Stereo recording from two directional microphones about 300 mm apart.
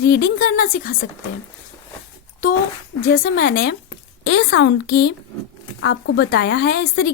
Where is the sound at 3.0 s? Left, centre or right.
Left.